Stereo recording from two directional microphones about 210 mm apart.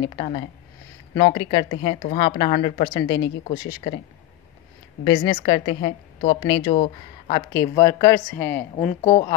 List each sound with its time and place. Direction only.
0.0 s a woman's voice: 25° left (ahead or behind)
5.0 s a woman's voice: 20° left (ahead or behind)
7.5 s speech: 15° left (ahead or behind)